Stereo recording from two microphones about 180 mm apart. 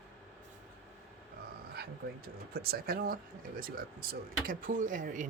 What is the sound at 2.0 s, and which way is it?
Speech, 55° right (ahead or behind).